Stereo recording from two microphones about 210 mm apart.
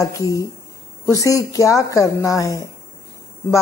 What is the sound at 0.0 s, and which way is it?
A woman's voice, 15° left (ahead or behind).